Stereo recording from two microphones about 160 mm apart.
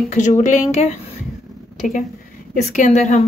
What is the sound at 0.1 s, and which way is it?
A woman's voice, 50° left (ahead or behind).